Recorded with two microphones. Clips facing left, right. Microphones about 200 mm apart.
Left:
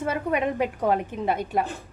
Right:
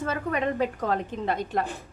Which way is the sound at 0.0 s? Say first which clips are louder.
Left 2 dB; 15° left (ahead or behind).